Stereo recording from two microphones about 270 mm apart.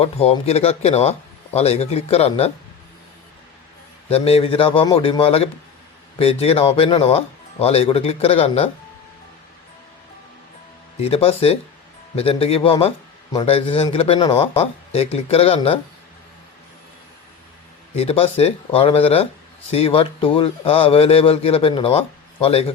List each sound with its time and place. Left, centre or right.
0.0 s a man's voice: left
4.1 s a man's voice: left
11.0 s a man's voice: left
17.9 s a man's voice: left